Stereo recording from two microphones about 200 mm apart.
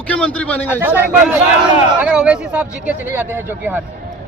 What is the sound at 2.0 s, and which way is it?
Speech, 5° right (ahead or behind).